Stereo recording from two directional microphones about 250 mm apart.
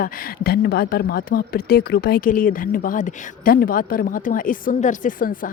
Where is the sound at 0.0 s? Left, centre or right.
Left.